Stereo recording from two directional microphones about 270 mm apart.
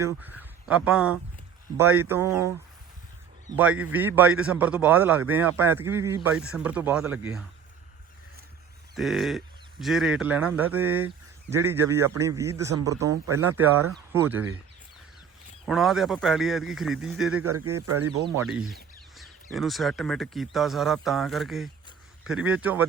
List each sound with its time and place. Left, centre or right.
0.0 s speech: centre
3.5 s speech: centre
9.0 s speech: centre
15.6 s speech: centre
17.7 s speech: right
18.3 s speech: centre